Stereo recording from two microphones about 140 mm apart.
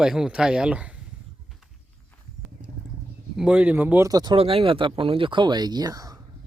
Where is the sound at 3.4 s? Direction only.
10° right (ahead or behind).